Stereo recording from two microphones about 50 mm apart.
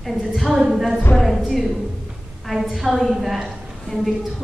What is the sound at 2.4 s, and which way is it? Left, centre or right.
A woman's voice, centre.